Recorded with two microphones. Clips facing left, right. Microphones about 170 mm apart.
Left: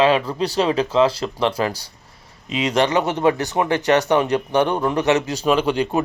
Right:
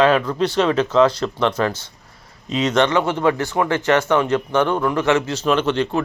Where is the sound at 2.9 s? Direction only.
15° left (ahead or behind).